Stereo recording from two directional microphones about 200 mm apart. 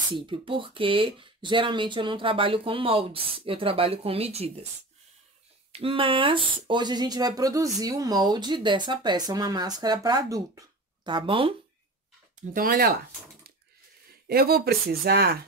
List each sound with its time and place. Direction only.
0.1 s speech: 25° right (ahead or behind)
5.7 s speech: 30° right (ahead or behind)
12.5 s speech: 50° right (ahead or behind)
14.2 s speech: 50° right (ahead or behind)